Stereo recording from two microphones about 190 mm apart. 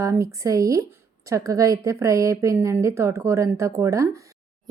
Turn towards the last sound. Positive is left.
turn(degrees=-15)  # may be behind; listen again after turning